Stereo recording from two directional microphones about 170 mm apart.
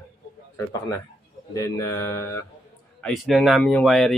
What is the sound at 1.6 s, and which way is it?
Speech, 15° left (ahead or behind).